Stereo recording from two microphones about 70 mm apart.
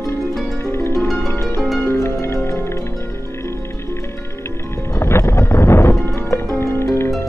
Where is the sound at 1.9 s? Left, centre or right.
Left.